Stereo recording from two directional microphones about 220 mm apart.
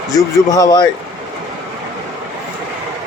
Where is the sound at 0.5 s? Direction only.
15° left (ahead or behind).